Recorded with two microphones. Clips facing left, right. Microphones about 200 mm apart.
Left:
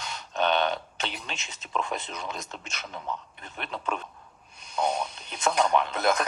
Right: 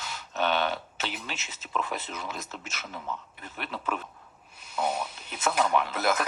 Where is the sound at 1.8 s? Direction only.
5° right (ahead or behind).